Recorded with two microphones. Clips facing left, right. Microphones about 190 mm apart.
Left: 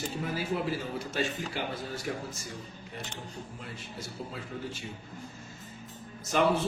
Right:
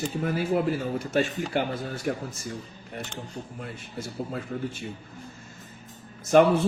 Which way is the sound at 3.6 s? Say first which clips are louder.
Right 5 dB; 55° right (ahead or behind).